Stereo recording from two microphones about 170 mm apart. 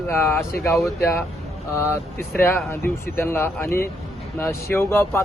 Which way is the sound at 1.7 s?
15° left (ahead or behind).